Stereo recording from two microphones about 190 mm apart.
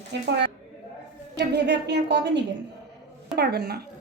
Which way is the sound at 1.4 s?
65° right (ahead or behind).